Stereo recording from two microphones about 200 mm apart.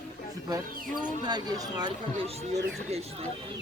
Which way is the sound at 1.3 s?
20° right (ahead or behind).